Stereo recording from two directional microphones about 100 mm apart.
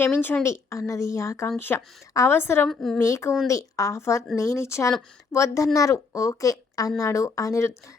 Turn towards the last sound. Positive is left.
turn(degrees=30)  # may be behind; listen again after turning